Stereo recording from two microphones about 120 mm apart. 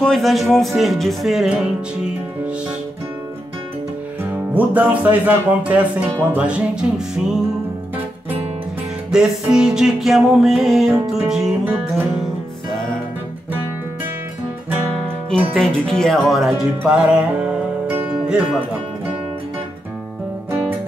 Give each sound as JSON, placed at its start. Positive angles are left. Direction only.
{"t": 0.0, "sound": "music", "side_deg": 5}
{"t": 4.2, "sound": "speech", "side_deg": -15}
{"t": 6.3, "sound": "music", "side_deg": -10}
{"t": 9.1, "sound": "music", "side_deg": -5}
{"t": 15.5, "sound": "music", "side_deg": 5}